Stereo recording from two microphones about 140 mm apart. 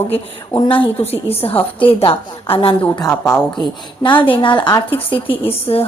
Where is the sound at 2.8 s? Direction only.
25° left (ahead or behind).